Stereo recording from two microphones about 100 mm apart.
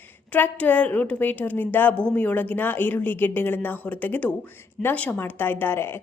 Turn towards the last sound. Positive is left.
turn(degrees=25)  # may be behind; listen again after turning